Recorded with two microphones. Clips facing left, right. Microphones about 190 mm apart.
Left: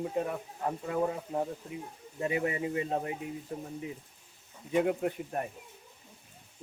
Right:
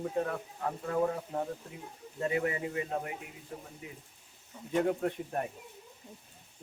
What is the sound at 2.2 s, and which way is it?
Speech, 20° left (ahead or behind).